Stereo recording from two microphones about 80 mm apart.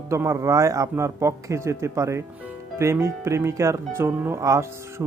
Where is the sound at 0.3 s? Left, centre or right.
Right.